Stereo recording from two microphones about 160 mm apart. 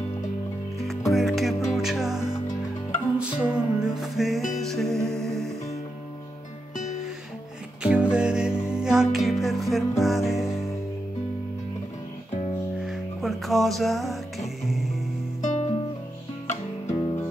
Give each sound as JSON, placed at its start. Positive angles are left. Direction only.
{"t": 0.7, "sound": "music", "side_deg": 0}
{"t": 7.8, "sound": "music", "side_deg": -5}
{"t": 12.8, "sound": "music", "side_deg": 0}
{"t": 15.4, "sound": "music", "side_deg": 45}